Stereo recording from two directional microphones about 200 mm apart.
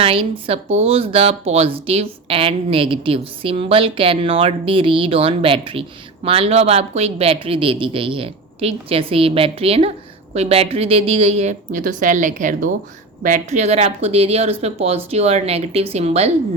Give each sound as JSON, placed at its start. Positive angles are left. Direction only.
{"t": 0.0, "sound": "a woman's voice", "side_deg": -25}